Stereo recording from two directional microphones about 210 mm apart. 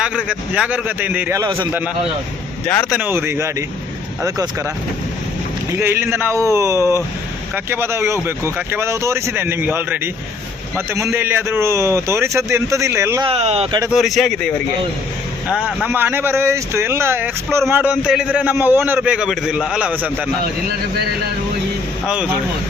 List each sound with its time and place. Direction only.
0.0 s speech: 5° right (ahead or behind)
2.9 s speech: 10° right (ahead or behind)
5.7 s speech: 10° right (ahead or behind)
13.2 s speech: 30° right (ahead or behind)
13.9 s a man's voice: centre (ahead or behind)
22.0 s a man's voice: 5° right (ahead or behind)